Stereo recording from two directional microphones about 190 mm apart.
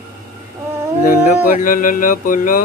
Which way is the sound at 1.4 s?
45° left (ahead or behind).